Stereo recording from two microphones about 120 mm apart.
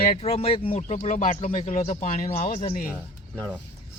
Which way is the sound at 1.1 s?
80° left.